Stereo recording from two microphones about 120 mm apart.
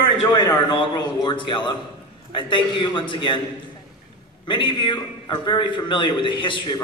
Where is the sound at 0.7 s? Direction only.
40° left (ahead or behind).